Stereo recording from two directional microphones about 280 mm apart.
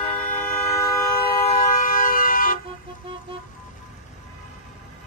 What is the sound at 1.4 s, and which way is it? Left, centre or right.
Vehicle, left.